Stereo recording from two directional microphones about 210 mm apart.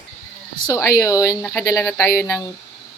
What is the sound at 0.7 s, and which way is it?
A woman's voice, 15° left (ahead or behind).